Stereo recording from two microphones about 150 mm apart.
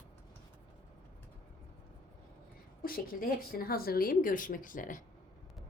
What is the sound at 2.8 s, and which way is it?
A woman's voice, 75° left (ahead or behind).